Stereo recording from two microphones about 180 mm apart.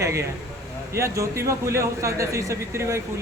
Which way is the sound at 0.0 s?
15° right (ahead or behind).